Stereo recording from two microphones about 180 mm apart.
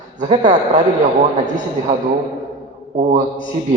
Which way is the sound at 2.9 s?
40° right (ahead or behind).